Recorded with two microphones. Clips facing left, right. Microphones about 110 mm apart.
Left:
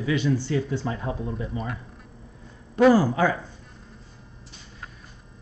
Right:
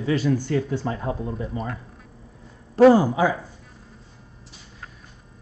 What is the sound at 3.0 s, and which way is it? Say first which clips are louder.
Speech: right 1 dB; 10° right (ahead or behind).